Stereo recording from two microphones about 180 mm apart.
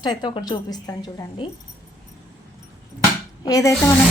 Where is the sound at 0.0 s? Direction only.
25° left (ahead or behind).